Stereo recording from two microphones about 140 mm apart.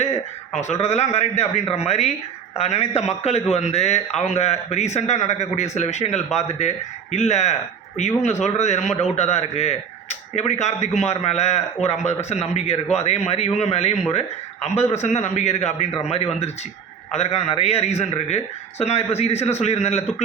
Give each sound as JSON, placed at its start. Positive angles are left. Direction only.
{"t": 0.6, "sound": "speech", "side_deg": 50}